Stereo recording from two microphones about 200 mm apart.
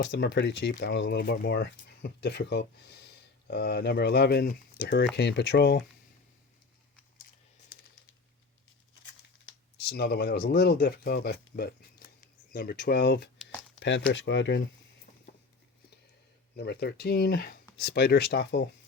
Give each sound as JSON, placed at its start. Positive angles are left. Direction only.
{"t": 0.0, "sound": "speech", "side_deg": 60}
{"t": 9.7, "sound": "speech", "side_deg": 50}
{"t": 16.6, "sound": "speech", "side_deg": 55}